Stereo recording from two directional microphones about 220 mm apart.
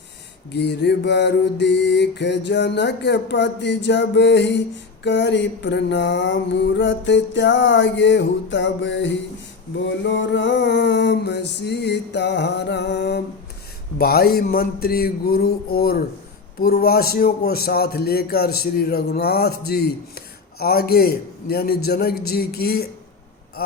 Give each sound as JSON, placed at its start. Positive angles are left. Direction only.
{"t": 0.5, "sound": "speech", "side_deg": 50}
{"t": 5.0, "sound": "mantra", "side_deg": 55}
{"t": 10.0, "sound": "speech", "side_deg": 55}
{"t": 23.6, "sound": "a sound", "side_deg": 45}